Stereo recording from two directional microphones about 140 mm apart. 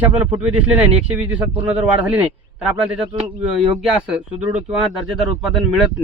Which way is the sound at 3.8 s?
5° right (ahead or behind).